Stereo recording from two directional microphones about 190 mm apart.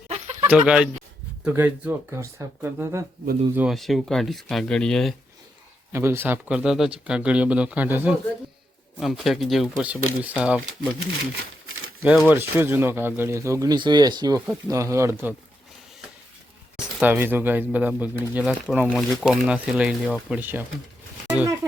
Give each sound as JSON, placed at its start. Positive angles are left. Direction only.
{"t": 0.1, "sound": "a sound", "side_deg": -35}
{"t": 0.5, "sound": "speech", "side_deg": -5}
{"t": 5.9, "sound": "speech", "side_deg": -10}
{"t": 12.3, "sound": "speech", "side_deg": -10}
{"t": 16.7, "sound": "speech", "side_deg": -5}